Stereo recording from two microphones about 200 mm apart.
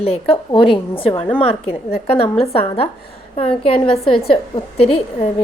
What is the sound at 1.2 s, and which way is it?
Speech, 5° left (ahead or behind).